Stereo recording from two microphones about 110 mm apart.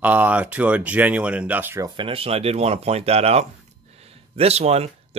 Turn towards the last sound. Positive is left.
turn(degrees=-70)  # may be behind; listen again after turning